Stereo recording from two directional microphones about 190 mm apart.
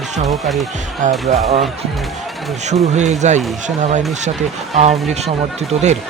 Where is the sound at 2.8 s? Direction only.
35° right (ahead or behind).